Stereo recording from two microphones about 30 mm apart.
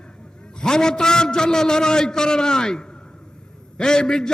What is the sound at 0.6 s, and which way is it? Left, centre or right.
A man's voice, left.